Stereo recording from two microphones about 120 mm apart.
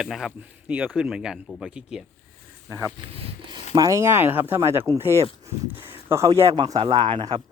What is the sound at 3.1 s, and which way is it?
Speech, 55° right (ahead or behind).